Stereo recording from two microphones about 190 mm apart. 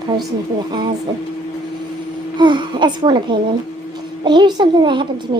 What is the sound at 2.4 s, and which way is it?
A child's voice, 25° right (ahead or behind).